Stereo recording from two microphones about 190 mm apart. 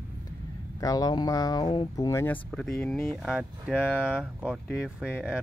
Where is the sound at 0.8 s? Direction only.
20° left (ahead or behind).